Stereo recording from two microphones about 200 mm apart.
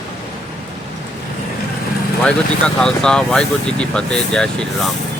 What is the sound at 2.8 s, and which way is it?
Speech, 5° left (ahead or behind).